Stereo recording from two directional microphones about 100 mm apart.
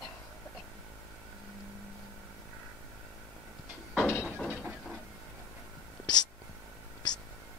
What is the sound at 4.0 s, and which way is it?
Mechanisms, 25° left (ahead or behind).